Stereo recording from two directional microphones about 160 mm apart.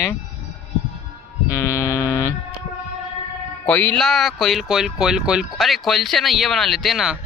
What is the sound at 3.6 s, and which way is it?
Speech, 10° left (ahead or behind).